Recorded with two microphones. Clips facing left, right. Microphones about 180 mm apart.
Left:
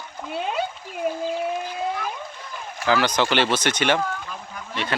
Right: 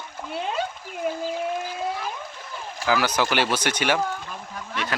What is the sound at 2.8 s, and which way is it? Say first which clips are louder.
Speech: left 2 dB; 5° right (ahead or behind).